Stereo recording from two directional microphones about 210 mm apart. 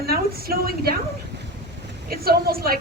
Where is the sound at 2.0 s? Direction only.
45° right (ahead or behind).